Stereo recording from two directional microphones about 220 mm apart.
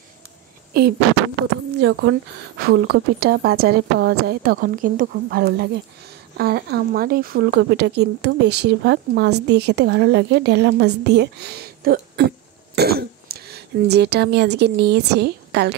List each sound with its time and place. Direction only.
0.7 s speech: 45° right (ahead or behind)
1.8 s a woman's voice: 55° right (ahead or behind)